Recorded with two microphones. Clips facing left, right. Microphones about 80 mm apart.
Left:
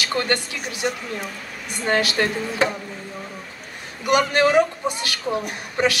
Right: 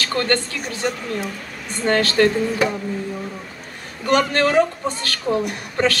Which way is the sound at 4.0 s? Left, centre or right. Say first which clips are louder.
Even; centre.